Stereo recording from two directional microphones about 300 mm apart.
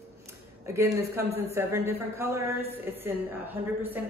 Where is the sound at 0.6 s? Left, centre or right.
Centre.